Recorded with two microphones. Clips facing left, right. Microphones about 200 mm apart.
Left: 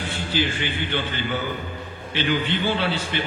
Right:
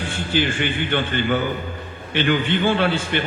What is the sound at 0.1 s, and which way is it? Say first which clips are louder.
A man's voice: right 3 dB; 50° right (ahead or behind).